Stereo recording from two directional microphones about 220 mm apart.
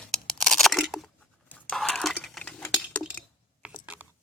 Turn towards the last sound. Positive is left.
turn(degrees=-10)  # may be behind; listen again after turning